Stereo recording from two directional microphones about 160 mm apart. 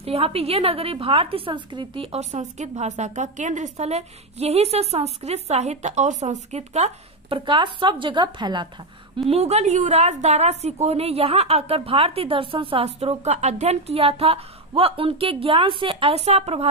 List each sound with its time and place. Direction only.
0.0 s a woman's voice: 40° right (ahead or behind)
7.3 s a woman's voice: 30° right (ahead or behind)
9.3 s a woman's voice: 40° right (ahead or behind)